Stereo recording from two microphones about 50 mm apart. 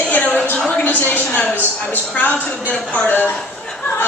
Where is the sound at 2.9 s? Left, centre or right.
Left.